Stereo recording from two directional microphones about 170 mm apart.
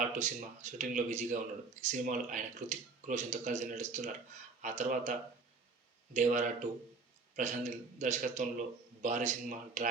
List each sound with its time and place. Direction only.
0.2 s speech: 45° right (ahead or behind)
6.1 s speech: 45° right (ahead or behind)